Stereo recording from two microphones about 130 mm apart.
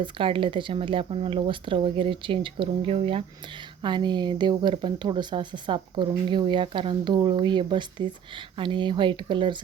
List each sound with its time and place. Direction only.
0.0 s speech: 40° right (ahead or behind)
3.8 s speech: 35° right (ahead or behind)